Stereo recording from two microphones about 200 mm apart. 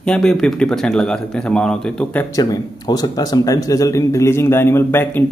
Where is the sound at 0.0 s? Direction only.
5° left (ahead or behind).